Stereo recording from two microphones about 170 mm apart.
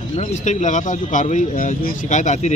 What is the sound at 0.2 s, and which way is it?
Speech, 45° left (ahead or behind).